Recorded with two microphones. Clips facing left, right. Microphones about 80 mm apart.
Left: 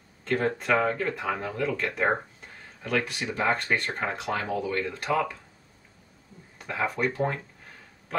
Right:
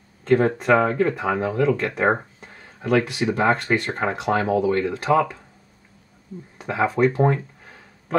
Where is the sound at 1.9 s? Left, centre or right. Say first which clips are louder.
Right 5 dB; right.